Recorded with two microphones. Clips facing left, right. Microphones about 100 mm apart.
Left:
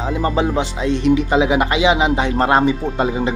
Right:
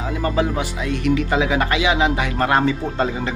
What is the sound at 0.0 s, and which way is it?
Speech, 25° left (ahead or behind).